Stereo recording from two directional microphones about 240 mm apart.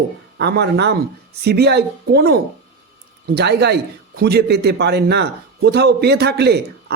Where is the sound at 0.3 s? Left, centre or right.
Right.